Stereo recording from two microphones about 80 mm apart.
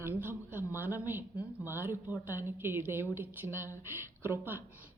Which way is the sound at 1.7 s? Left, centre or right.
Right.